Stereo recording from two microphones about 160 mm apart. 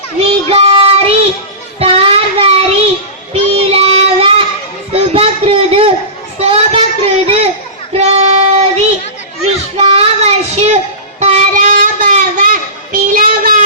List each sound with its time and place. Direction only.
0.5 s child singing: 40° right (ahead or behind)
4.9 s a sound: 40° right (ahead or behind)
6.4 s child singing: 40° right (ahead or behind); by 13.6 s 60° right (ahead or behind)